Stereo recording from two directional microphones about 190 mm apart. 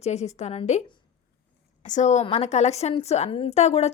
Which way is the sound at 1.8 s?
40° left (ahead or behind).